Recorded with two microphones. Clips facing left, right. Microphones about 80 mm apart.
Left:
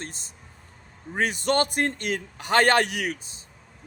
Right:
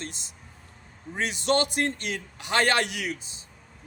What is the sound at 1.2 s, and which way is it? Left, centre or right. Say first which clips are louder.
Speech: left 2 dB; left.